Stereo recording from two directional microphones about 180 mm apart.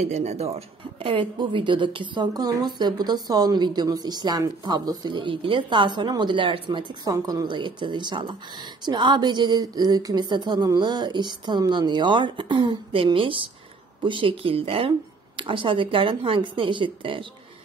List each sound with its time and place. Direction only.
0.0 s speech: 40° right (ahead or behind)